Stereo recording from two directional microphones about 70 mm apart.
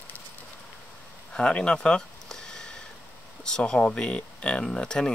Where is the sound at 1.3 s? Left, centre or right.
Centre.